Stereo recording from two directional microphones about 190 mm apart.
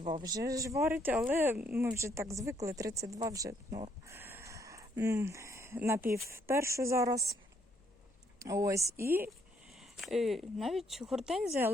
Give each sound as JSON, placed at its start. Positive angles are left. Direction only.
{"t": 0.0, "sound": "speech", "side_deg": -25}
{"t": 8.4, "sound": "speech", "side_deg": -15}
{"t": 9.6, "sound": "speech", "side_deg": 0}